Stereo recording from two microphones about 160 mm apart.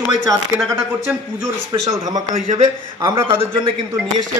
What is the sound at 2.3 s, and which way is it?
Speech, 45° right (ahead or behind).